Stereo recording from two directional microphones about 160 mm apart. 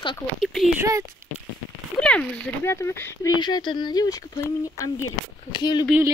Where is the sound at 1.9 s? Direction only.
5° left (ahead or behind).